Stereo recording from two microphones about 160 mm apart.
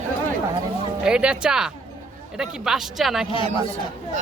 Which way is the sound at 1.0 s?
5° right (ahead or behind).